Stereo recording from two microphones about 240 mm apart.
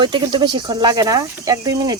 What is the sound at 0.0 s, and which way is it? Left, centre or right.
Speech, centre.